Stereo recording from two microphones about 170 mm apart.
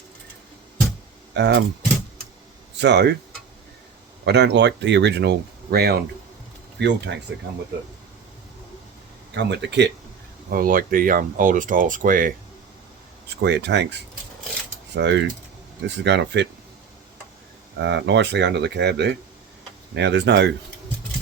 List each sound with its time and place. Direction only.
1.3 s speech: 85° right
2.7 s speech: 85° right
4.3 s speech: 85° right; by 6.0 s 70° right (ahead or behind)
6.7 s speech: 90° right
9.3 s speech: 90° right
10.5 s speech: 55° right (ahead or behind)
13.4 s speech: 85° right
17.7 s speech: 90° right